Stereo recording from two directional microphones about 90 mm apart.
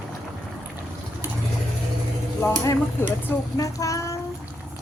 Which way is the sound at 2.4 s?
25° left (ahead or behind).